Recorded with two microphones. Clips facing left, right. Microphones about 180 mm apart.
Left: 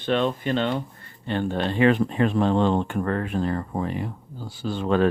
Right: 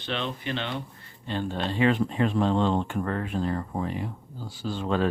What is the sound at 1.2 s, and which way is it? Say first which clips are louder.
Speech: left 4 dB; 60° left (ahead or behind).